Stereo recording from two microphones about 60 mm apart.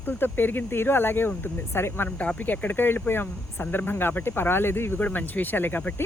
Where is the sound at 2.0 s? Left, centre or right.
Left.